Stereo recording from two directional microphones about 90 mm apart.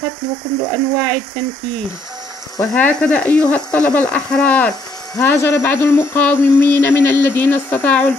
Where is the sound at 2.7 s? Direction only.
20° left (ahead or behind).